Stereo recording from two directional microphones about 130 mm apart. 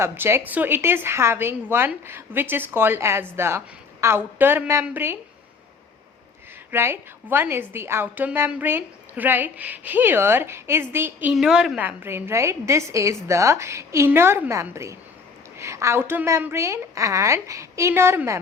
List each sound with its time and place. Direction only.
0.0 s a woman's voice: 20° right (ahead or behind)
6.7 s a woman's voice: 20° right (ahead or behind)
11.3 s a woman's voice: 5° right (ahead or behind)